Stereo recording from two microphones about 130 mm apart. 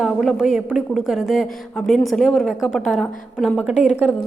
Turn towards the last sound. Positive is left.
turn(degrees=-10)  # may be behind; listen again after turning